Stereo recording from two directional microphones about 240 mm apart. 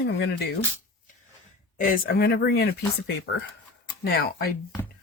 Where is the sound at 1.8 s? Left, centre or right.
Left.